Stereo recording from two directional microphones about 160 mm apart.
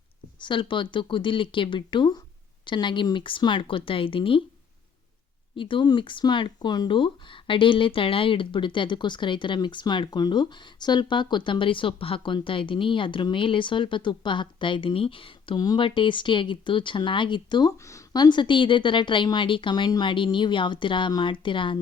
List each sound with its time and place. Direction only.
0.3 s speech: 30° left (ahead or behind)
5.5 s speech: 30° left (ahead or behind)